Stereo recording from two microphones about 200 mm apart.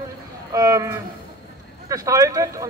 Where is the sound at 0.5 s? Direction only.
15° right (ahead or behind).